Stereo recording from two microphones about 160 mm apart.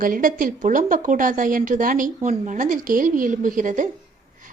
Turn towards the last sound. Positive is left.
turn(degrees=-55)  # may be behind; listen again after turning